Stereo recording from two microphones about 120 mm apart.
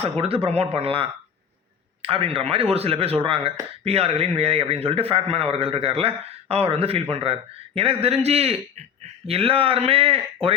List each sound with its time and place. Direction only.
0.0 s a man's voice: 55° right (ahead or behind)